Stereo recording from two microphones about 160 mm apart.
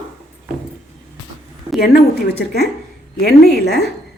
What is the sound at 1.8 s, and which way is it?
Speech, 75° left (ahead or behind).